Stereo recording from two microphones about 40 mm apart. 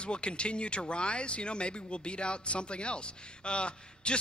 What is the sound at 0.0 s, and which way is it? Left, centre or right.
A man's voice, left.